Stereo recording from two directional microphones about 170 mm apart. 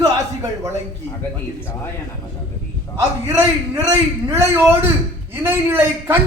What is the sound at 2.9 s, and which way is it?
A man's voice, 20° right (ahead or behind).